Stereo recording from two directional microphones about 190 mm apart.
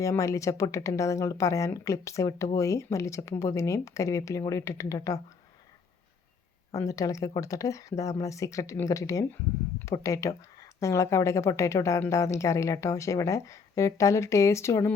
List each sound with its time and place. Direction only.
0.0 s speech: 15° left (ahead or behind)
6.7 s speech: 15° left (ahead or behind)